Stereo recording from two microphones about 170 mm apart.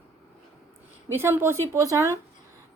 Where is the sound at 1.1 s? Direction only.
15° right (ahead or behind).